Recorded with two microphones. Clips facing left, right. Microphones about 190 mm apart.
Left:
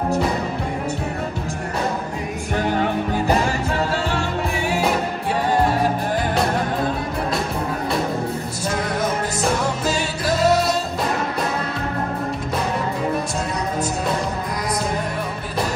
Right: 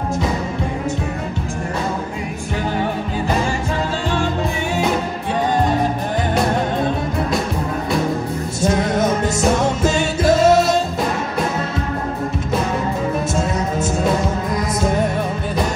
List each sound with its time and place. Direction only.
8.6 s music: 20° right (ahead or behind)